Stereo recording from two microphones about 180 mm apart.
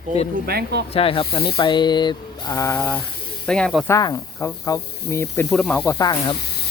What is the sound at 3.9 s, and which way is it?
Speech, 20° left (ahead or behind).